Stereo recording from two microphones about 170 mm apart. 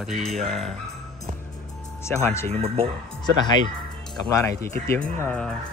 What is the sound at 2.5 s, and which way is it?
Speech, 35° right (ahead or behind).